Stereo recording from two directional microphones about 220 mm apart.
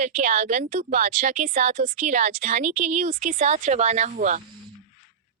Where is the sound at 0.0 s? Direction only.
35° right (ahead or behind).